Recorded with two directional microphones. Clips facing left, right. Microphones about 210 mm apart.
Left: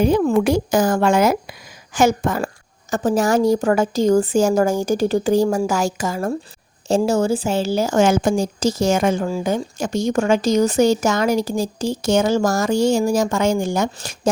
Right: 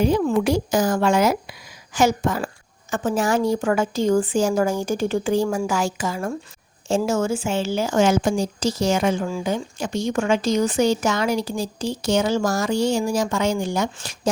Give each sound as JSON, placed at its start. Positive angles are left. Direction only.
{"t": 0.0, "sound": "speech", "side_deg": 55}
{"t": 2.9, "sound": "a woman's voice", "side_deg": 40}